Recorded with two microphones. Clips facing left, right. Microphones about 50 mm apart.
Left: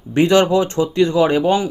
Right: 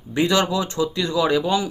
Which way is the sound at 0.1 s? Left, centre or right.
Left.